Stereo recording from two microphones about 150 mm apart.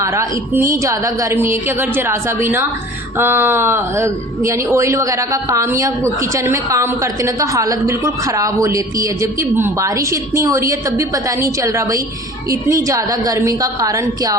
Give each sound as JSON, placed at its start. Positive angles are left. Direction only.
{"t": 0.0, "sound": "a woman's voice", "side_deg": -20}